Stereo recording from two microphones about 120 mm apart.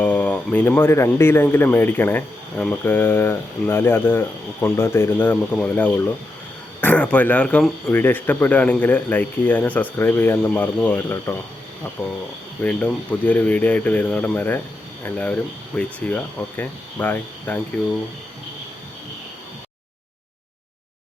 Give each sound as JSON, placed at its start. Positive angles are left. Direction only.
{"t": 0.0, "sound": "speech", "side_deg": 10}
{"t": 12.6, "sound": "speech", "side_deg": 10}